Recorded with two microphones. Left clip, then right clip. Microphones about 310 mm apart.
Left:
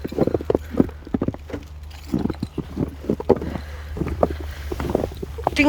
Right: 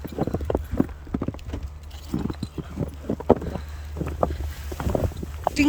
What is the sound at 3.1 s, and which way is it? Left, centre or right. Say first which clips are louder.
Boat: left 1 dB; left.